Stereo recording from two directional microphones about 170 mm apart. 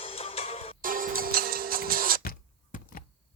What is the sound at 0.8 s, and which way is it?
Music, 55° right (ahead or behind).